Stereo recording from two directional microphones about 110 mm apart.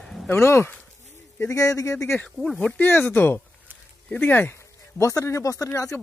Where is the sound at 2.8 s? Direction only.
15° left (ahead or behind).